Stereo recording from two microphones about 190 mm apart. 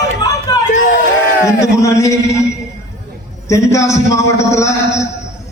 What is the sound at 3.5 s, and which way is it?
A man's voice, 15° left (ahead or behind).